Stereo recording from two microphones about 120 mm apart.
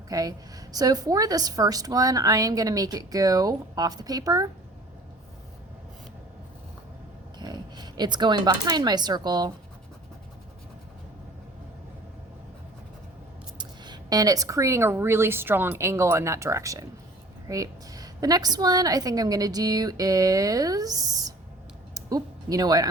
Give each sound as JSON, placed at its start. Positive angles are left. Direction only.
{"t": 0.1, "sound": "a woman's voice", "side_deg": -30}
{"t": 7.3, "sound": "speech", "side_deg": -35}
{"t": 13.6, "sound": "a woman's voice", "side_deg": -35}